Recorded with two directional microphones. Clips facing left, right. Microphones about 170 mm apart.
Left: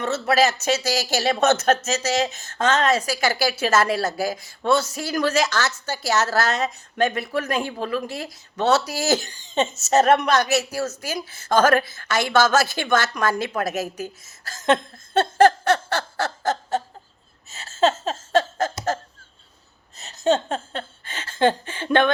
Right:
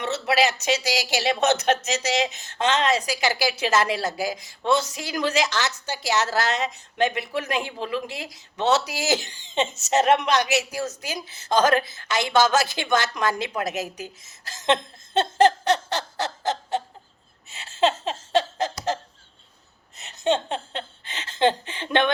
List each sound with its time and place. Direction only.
0.0 s speech: 15° right (ahead or behind)
9.2 s speech: 45° left (ahead or behind)
9.6 s speech: 15° right (ahead or behind)
17.5 s a sound: 40° left (ahead or behind)
20.0 s a sound: 40° left (ahead or behind)
21.0 s speech: 20° right (ahead or behind)